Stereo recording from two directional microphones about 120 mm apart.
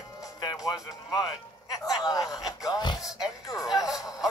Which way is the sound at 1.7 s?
30° left (ahead or behind).